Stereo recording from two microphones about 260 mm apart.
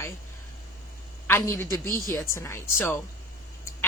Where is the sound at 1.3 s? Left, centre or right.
Centre.